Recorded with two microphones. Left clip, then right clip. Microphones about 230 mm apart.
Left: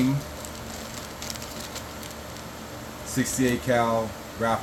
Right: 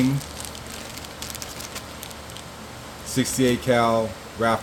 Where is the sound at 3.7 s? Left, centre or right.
Right.